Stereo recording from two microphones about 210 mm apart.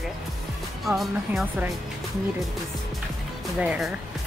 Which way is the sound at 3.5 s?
5° right (ahead or behind).